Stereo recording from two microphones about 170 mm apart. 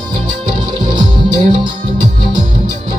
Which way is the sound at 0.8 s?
25° right (ahead or behind).